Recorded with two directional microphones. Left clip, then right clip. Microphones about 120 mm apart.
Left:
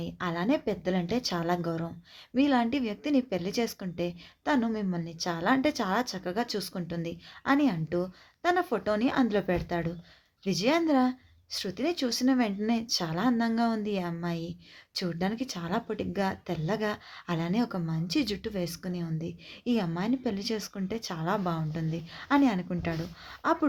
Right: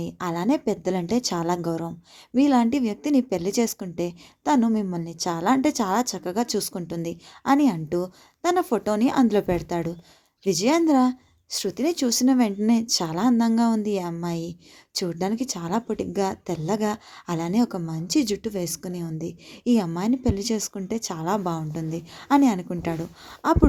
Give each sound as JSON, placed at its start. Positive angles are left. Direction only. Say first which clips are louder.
{"t": 0.0, "sound": "a woman's voice", "louder": "right 5 dB", "side_deg": -45}